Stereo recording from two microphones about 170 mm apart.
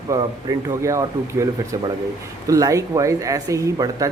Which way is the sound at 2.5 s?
20° right (ahead or behind).